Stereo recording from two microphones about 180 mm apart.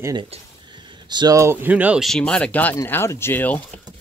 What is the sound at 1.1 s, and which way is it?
Speech, 20° right (ahead or behind).